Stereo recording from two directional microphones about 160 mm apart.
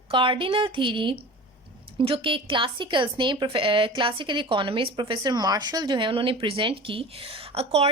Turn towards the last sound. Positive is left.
turn(degrees=-40)  # may be behind; listen again after turning